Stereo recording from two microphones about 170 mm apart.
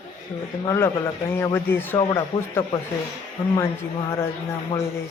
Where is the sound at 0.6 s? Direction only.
15° left (ahead or behind).